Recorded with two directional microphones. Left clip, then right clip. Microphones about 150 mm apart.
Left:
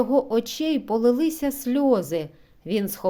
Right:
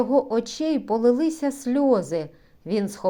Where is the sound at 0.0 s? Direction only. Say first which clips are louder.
Even; 20° left (ahead or behind).